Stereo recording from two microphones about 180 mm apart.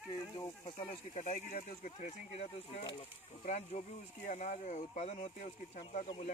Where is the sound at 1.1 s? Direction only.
45° left (ahead or behind).